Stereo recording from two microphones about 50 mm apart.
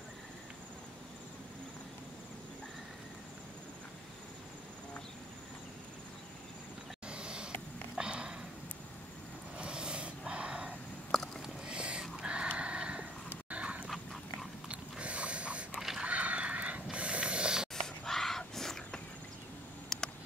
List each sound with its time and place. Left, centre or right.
7.1 s vehicle: centre
8.0 s sniff: centre
9.6 s vehicle: centre
11.4 s a sound: centre
13.5 s dog: right
13.8 s dog: centre
14.7 s mechanisms: right
16.0 s a sound: right
16.9 s vehicle: right
17.7 s a sound: centre